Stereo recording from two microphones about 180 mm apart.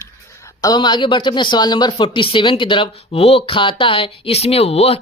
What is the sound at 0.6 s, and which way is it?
Speech, 25° left (ahead or behind).